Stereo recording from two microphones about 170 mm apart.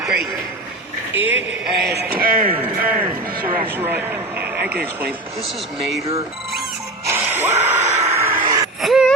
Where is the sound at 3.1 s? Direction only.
55° right (ahead or behind).